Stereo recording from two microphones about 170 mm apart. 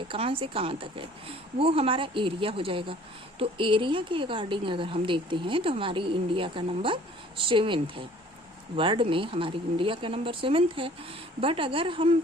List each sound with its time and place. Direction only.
0.1 s a woman's voice: 30° right (ahead or behind)